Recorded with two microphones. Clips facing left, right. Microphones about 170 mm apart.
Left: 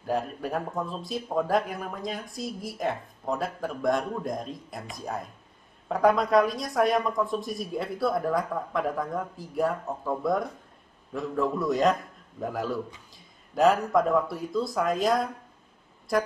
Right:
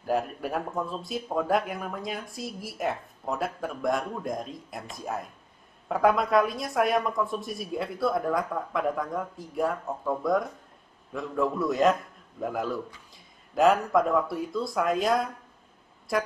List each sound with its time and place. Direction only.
0.0 s a man's voice: centre (ahead or behind)